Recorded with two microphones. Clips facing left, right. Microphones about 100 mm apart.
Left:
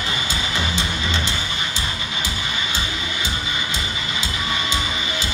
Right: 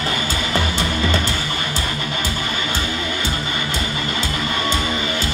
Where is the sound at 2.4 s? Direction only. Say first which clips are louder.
Right 3 dB; 50° right (ahead or behind).